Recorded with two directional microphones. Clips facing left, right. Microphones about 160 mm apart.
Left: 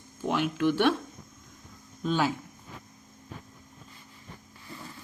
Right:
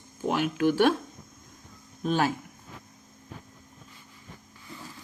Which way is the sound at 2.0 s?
50° right (ahead or behind).